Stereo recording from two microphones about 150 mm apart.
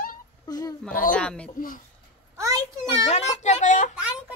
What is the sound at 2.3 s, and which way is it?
Speech, 20° right (ahead or behind).